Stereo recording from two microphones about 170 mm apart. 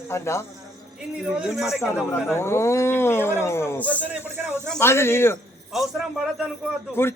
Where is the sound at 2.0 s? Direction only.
15° left (ahead or behind).